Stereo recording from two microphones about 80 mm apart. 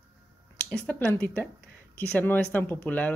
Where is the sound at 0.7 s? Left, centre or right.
Left.